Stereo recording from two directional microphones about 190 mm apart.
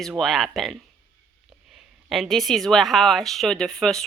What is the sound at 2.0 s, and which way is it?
Speech, centre (ahead or behind).